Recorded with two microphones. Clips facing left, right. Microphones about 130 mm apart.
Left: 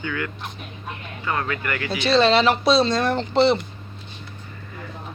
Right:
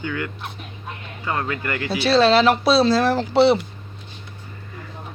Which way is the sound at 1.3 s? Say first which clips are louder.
Right 1 dB; 30° right (ahead or behind).